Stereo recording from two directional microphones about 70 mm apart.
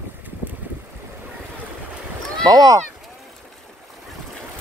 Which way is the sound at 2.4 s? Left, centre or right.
Right.